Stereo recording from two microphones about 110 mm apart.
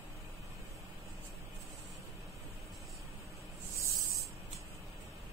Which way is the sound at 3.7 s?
25° right (ahead or behind).